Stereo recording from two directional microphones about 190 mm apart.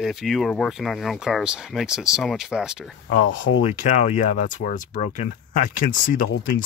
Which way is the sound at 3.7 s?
40° left (ahead or behind).